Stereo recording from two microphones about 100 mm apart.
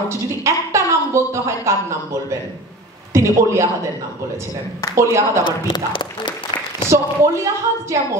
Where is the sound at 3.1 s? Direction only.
30° right (ahead or behind).